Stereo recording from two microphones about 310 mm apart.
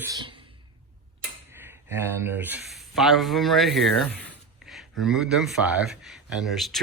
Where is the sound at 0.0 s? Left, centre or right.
Centre.